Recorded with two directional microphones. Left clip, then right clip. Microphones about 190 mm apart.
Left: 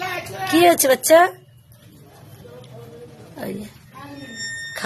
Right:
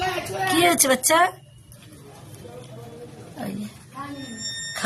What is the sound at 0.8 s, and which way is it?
Speech, 35° left (ahead or behind).